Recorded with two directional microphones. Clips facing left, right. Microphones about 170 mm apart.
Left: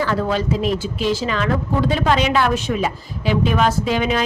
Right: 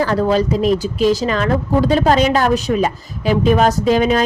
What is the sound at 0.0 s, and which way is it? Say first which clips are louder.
Speech: right 5 dB; 40° right (ahead or behind).